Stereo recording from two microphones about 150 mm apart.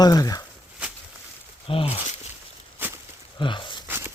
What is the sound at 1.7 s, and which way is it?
Speech, 40° left (ahead or behind).